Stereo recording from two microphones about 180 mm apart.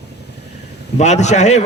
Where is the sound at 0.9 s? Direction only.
40° left (ahead or behind).